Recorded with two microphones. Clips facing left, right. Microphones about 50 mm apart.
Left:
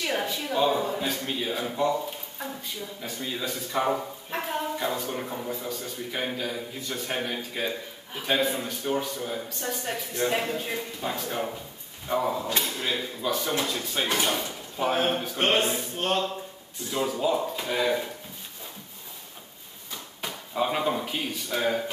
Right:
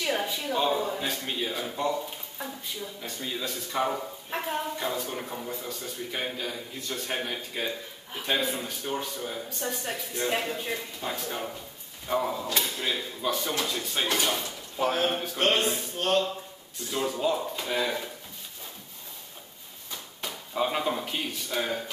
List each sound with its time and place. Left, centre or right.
0.0 s a sound: centre
0.7 s a man's voice: centre
12.4 s speech: left
12.8 s a man's voice: centre
14.0 s speech: centre
16.9 s a man's voice: centre
19.9 s speech: centre